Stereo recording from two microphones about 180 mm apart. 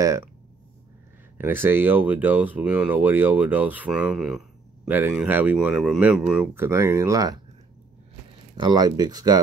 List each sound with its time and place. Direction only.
0.0 s speech: 15° right (ahead or behind)
1.4 s speech: 10° right (ahead or behind)
8.5 s speech: 25° right (ahead or behind)